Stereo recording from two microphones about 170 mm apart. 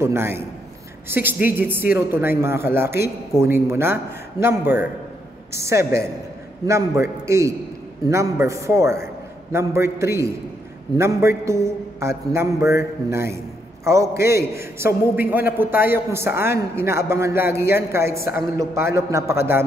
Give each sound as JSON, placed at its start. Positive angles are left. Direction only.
{"t": 0.0, "sound": "a woman's voice", "side_deg": -15}